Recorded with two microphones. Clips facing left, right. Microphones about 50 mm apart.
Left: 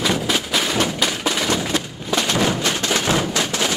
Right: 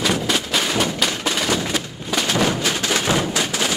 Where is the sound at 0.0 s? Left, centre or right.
Centre.